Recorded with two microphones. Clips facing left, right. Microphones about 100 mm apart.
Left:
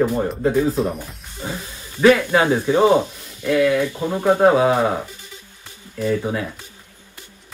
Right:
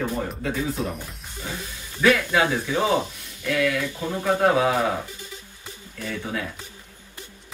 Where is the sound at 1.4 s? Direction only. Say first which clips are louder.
Left 5 dB; 30° left (ahead or behind).